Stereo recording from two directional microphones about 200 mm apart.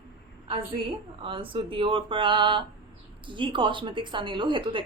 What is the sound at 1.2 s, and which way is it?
A woman's voice, 25° right (ahead or behind).